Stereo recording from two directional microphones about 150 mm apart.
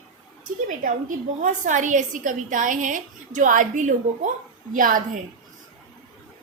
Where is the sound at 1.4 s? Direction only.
60° right (ahead or behind).